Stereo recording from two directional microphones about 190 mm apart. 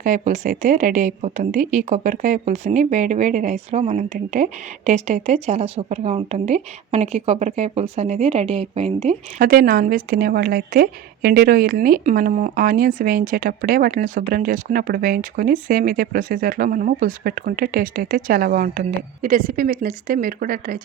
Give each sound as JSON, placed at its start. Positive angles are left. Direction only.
{"t": 0.0, "sound": "a woman's voice", "side_deg": -45}
{"t": 9.4, "sound": "a woman's voice", "side_deg": -50}